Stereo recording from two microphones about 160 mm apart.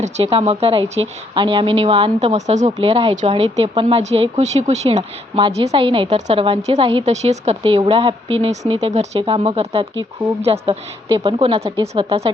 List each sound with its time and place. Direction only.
0.0 s a woman's voice: 40° right (ahead or behind)
2.2 s a woman's voice: 45° right (ahead or behind)